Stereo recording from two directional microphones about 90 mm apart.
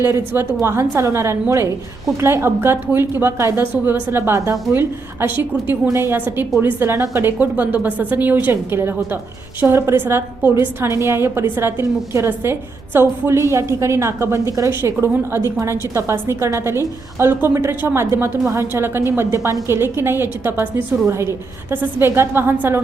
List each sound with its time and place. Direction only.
0.0 s a woman's voice: 25° right (ahead or behind)